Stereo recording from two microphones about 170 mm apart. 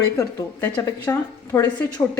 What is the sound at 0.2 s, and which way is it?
Speech, 20° left (ahead or behind).